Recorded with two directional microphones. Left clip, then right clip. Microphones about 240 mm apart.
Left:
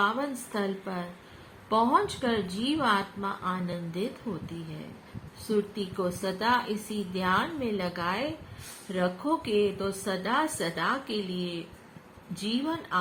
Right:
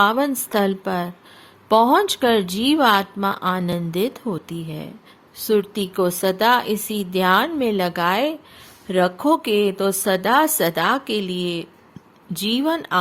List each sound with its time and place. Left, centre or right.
0.0 s a woman's voice: right
5.5 s a woman's voice: right